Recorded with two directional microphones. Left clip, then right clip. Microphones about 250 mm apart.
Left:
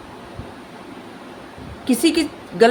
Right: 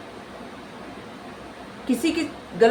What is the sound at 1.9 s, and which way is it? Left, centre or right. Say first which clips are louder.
Speech: left 6 dB; left.